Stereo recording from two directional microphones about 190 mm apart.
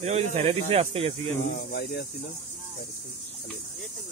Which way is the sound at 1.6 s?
55° left (ahead or behind).